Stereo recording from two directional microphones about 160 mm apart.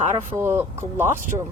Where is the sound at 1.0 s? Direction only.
55° right (ahead or behind).